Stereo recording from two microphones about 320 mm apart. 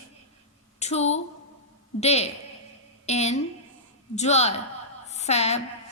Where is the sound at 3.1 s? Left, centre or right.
Centre.